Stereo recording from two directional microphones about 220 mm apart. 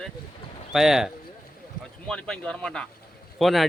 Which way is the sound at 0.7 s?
Centre (ahead or behind).